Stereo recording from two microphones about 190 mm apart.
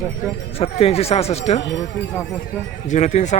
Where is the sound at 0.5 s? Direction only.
30° left (ahead or behind).